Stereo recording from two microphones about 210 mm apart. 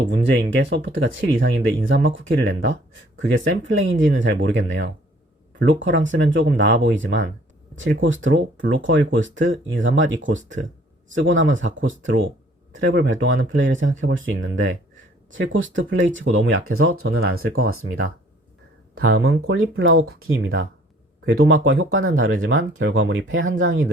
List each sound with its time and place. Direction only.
0.1 s speech: 55° right (ahead or behind)